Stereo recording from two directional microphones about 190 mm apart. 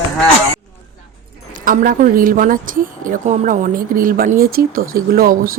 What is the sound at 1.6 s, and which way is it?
A woman's voice, 45° right (ahead or behind).